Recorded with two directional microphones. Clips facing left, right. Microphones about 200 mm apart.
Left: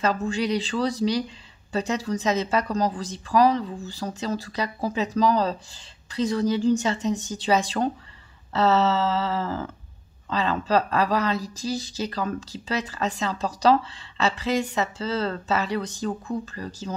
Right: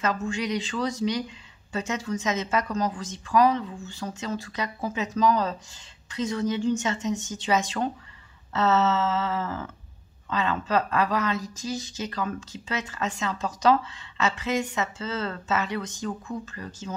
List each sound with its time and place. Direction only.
0.0 s speech: 35° left (ahead or behind)